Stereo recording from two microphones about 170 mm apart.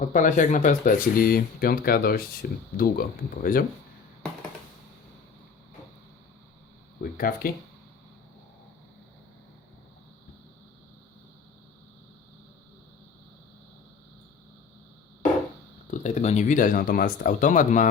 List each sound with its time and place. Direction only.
0.0 s speech: 50° left (ahead or behind)
7.0 s a sound: 60° left (ahead or behind)
15.9 s speech: 45° left (ahead or behind)